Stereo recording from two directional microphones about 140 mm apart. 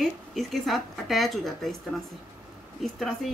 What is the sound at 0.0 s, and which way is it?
Speech, centre (ahead or behind).